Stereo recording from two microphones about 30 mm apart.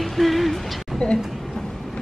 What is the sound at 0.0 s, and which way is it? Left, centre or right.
Music, centre.